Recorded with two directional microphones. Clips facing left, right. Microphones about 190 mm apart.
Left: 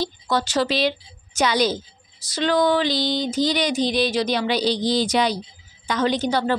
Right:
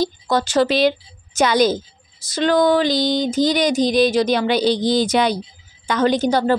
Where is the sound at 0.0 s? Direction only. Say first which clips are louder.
Right 4 dB; 45° right (ahead or behind).